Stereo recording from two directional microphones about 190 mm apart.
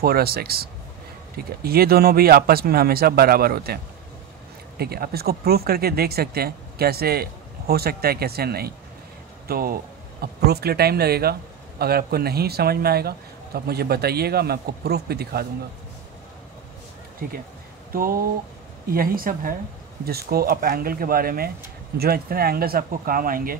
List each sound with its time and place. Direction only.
0.0 s speech: 55° right (ahead or behind)
17.2 s speech: 50° right (ahead or behind)